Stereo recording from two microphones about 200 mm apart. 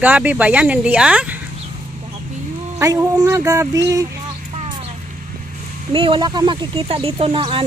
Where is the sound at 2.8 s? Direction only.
15° right (ahead or behind).